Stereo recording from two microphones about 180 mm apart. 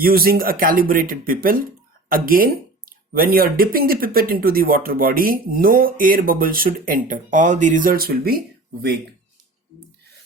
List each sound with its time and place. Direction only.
0.0 s speech: 55° right (ahead or behind)